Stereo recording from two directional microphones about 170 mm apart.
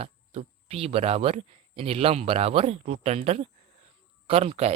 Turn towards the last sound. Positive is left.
turn(degrees=-35)  # may be behind; listen again after turning